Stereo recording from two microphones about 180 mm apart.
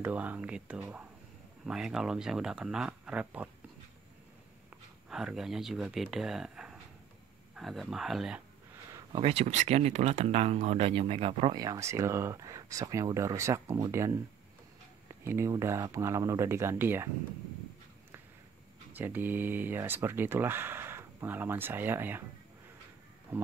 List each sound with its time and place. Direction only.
0.0 s speech: 10° right (ahead or behind)
5.1 s speech: 5° right (ahead or behind)
9.2 s speech: 35° right (ahead or behind)
11.6 s speech: 15° right (ahead or behind)
15.2 s speech: 15° right (ahead or behind)
18.9 s speech: 10° right (ahead or behind)
23.3 s speech: 15° right (ahead or behind)